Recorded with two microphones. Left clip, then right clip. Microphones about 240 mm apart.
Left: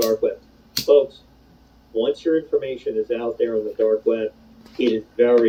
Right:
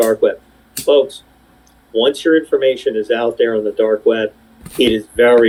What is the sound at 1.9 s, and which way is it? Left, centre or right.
Speech, right.